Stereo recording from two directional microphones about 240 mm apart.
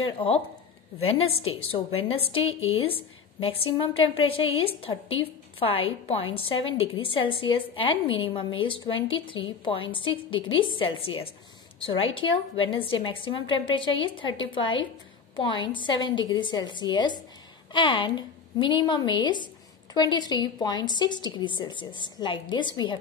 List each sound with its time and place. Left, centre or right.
1.0 s a woman's voice: left